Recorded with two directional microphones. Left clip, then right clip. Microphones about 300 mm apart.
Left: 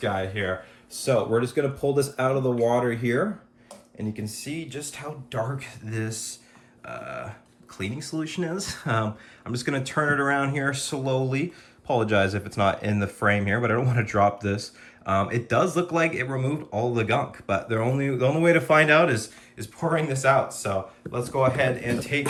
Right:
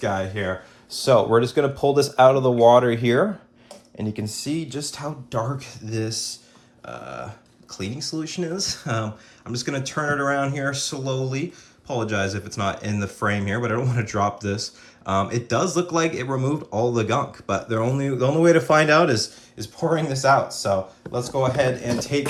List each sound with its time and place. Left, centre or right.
0.0 s speech: centre